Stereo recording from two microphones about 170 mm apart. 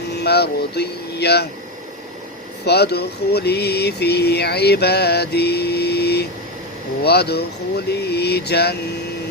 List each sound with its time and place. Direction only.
0.1 s speech: 75° left (ahead or behind)
2.6 s mantra: 75° left (ahead or behind)